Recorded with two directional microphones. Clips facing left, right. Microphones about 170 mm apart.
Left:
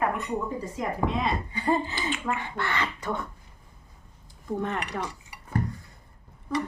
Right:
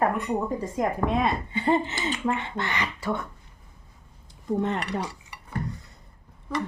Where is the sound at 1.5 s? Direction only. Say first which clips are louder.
Right 3 dB; 20° right (ahead or behind).